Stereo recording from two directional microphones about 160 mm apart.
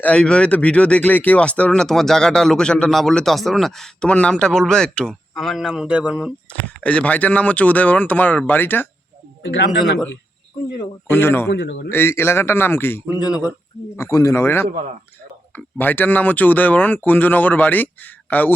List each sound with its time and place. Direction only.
0.0 s speech: 5° left (ahead or behind)
6.5 s speech: 5° left (ahead or behind)
11.1 s speech: 15° left (ahead or behind)
11.5 s a man's voice: 90° left
11.9 s speech: 15° left (ahead or behind)
13.2 s speech: 5° right (ahead or behind)
13.9 s speech: 20° left (ahead or behind)